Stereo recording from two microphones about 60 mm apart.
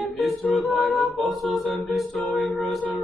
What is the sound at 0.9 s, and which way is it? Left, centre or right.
Music, centre.